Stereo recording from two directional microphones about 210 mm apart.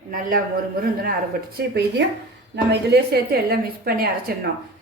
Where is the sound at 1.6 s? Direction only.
50° right (ahead or behind).